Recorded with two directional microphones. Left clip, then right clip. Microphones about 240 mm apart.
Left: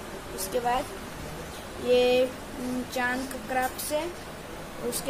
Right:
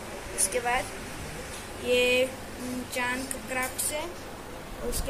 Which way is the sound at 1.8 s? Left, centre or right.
Left.